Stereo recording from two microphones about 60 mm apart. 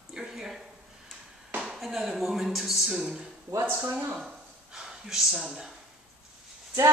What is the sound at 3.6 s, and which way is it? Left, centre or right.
Speech, right.